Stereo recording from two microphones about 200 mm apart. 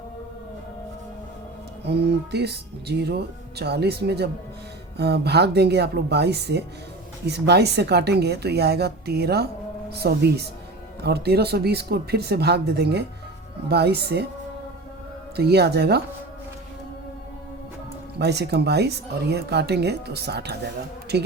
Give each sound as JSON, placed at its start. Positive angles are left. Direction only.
{"t": 1.8, "sound": "speech", "side_deg": -55}
{"t": 15.4, "sound": "speech", "side_deg": -55}
{"t": 18.2, "sound": "speech", "side_deg": -55}